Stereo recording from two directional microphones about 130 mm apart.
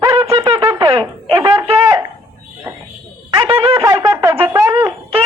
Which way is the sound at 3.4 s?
45° right (ahead or behind).